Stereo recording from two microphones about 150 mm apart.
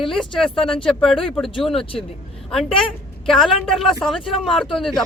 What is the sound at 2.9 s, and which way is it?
Speech, centre (ahead or behind).